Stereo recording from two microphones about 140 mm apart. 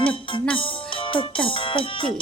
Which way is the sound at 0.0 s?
40° left (ahead or behind).